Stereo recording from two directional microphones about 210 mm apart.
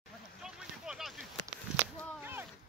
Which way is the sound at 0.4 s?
5° right (ahead or behind).